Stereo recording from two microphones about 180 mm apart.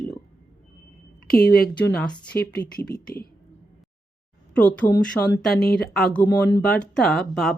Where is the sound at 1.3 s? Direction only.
55° left (ahead or behind).